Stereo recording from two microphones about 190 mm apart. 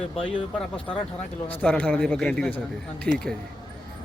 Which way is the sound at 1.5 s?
5° left (ahead or behind).